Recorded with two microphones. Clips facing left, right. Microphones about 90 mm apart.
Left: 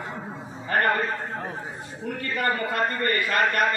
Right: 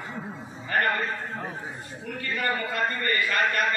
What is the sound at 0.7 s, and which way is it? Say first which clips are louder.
Speech: left 2 dB; 35° left (ahead or behind).